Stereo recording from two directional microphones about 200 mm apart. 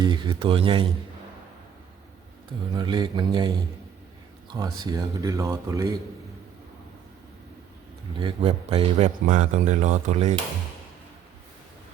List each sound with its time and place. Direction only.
0.0 s speech: 25° right (ahead or behind)
2.7 s speech: 20° right (ahead or behind)
8.2 s speech: 25° right (ahead or behind)
9.2 s speech: 40° right (ahead or behind)